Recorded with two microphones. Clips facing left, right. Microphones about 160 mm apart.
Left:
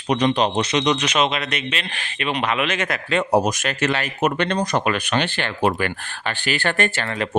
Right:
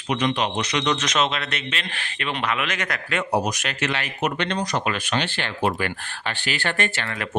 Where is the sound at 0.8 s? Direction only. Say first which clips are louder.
Left 3 dB; 10° left (ahead or behind).